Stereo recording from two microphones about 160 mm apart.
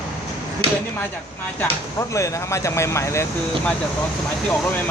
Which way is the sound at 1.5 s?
20° left (ahead or behind).